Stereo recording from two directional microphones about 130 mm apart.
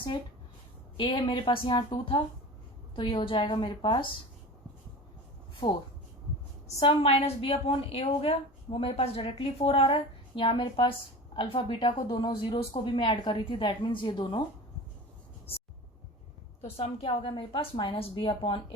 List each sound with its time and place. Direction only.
0.9 s a woman's voice: 40° left (ahead or behind)
6.7 s a woman's voice: 50° left (ahead or behind)
16.6 s a woman's voice: 50° left (ahead or behind)